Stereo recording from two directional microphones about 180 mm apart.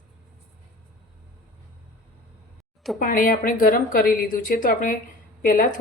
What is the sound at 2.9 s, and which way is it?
A woman's voice, 50° left (ahead or behind).